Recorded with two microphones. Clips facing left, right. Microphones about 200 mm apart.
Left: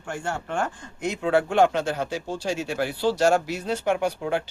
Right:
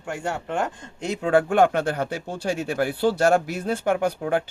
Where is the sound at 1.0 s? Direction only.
45° right (ahead or behind).